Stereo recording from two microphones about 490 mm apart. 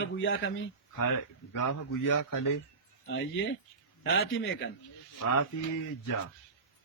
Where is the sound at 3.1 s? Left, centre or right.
Left.